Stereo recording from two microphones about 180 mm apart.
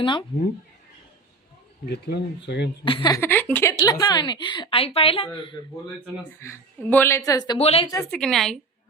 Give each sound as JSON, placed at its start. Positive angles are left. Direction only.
{"t": 0.0, "sound": "speech", "side_deg": 30}
{"t": 1.9, "sound": "speech", "side_deg": 70}
{"t": 2.8, "sound": "speech", "side_deg": 25}
{"t": 3.2, "sound": "a woman's voice", "side_deg": 10}
{"t": 3.8, "sound": "speech", "side_deg": 25}
{"t": 6.4, "sound": "a woman's voice", "side_deg": 10}
{"t": 7.6, "sound": "speech", "side_deg": 35}
{"t": 8.1, "sound": "a woman's voice", "side_deg": 0}